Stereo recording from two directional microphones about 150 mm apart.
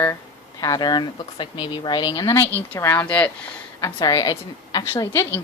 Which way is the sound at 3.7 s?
25° left (ahead or behind).